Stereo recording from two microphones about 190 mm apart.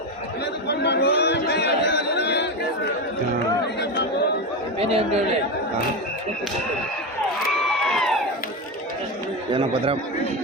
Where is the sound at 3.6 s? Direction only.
65° left (ahead or behind).